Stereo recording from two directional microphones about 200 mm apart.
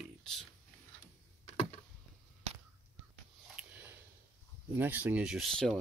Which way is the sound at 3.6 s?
10° right (ahead or behind).